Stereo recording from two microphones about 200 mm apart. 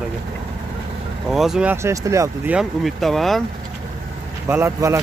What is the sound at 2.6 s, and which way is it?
Speech, centre (ahead or behind).